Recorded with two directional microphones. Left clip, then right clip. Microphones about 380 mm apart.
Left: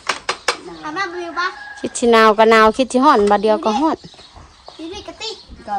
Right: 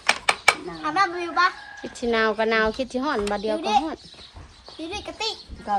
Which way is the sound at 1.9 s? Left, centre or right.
Centre.